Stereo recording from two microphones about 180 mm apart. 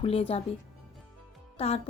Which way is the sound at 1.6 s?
35° left (ahead or behind).